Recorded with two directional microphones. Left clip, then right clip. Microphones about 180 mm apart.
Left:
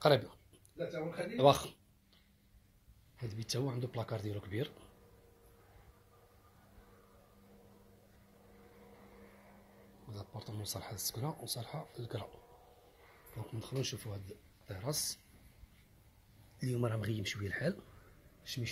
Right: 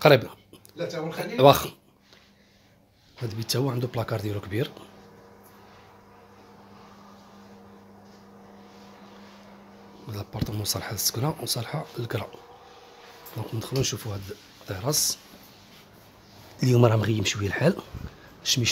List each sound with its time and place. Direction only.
0.0 s speech: 35° right (ahead or behind)
3.3 s speech: 30° right (ahead or behind)
10.1 s speech: 40° right (ahead or behind)
13.4 s speech: 30° right (ahead or behind)
16.5 s speech: 35° right (ahead or behind)
18.4 s speech: 50° right (ahead or behind)